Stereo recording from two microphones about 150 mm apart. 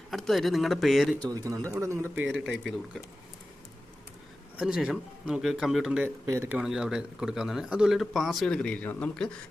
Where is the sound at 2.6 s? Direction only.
Centre (ahead or behind).